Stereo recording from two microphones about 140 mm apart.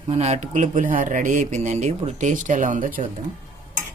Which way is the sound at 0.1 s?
50° right (ahead or behind).